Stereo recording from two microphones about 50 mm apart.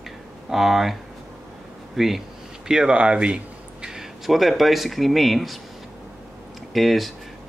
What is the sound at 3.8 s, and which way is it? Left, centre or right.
Speech, centre.